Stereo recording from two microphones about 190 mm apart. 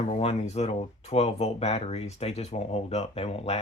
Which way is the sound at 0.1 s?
30° left (ahead or behind).